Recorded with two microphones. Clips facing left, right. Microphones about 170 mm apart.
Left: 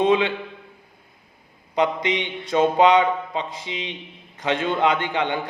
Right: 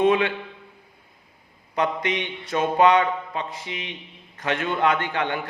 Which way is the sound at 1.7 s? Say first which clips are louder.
Left 3 dB; 15° left (ahead or behind).